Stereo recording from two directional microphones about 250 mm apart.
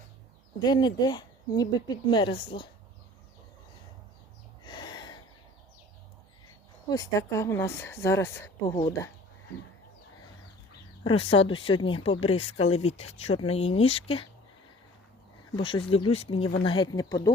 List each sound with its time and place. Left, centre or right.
0.6 s speech: centre
4.6 s a sound: centre
6.9 s speech: centre
11.0 s speech: left
15.5 s speech: centre